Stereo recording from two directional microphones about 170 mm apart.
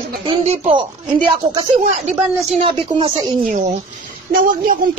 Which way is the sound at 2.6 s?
30° right (ahead or behind).